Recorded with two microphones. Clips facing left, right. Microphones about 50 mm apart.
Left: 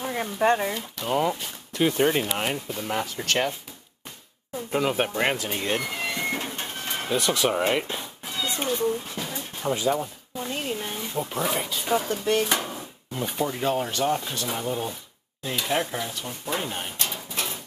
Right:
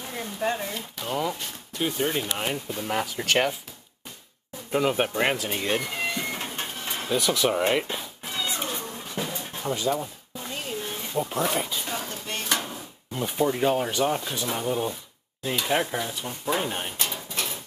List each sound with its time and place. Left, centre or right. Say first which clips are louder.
0.0 s speech: left 5 dB; left
1.0 s speech: left 4 dB; centre
1.8 s speech: left 5 dB; left
2.3 s speech: left 2 dB; centre
2.7 s speech: even; centre
4.7 s speech: right 1 dB; centre
6.4 s bird: even; centre
7.2 s speech: even; centre
8.3 s cat: even; centre
8.7 s a sound: left 6 dB; centre
9.6 s a sound: left 2 dB; centre
11.0 s speech: right 1 dB; centre
13.1 s speech: right 3 dB; centre
17.1 s dishes: even; centre